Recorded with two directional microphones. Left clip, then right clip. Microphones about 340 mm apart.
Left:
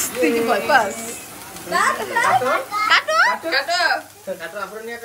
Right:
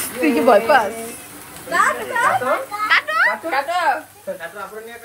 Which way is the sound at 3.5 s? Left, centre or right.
Centre.